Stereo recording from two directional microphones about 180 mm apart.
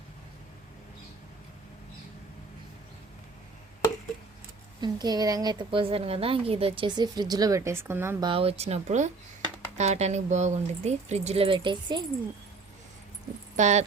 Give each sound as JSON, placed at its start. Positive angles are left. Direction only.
{"t": 4.8, "sound": "a woman's voice", "side_deg": -20}
{"t": 8.2, "sound": "speech", "side_deg": -30}
{"t": 13.6, "sound": "speech", "side_deg": -40}